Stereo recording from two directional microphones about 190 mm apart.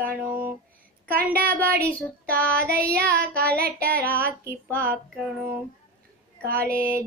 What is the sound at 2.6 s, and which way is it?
Child singing, 55° right (ahead or behind).